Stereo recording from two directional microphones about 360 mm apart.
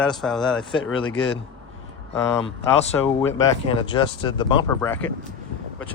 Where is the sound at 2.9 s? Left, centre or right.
Centre.